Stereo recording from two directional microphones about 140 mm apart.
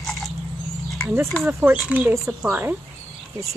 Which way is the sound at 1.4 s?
15° right (ahead or behind).